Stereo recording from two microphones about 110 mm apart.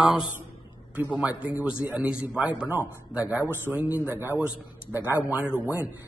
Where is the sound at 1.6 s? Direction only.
10° right (ahead or behind).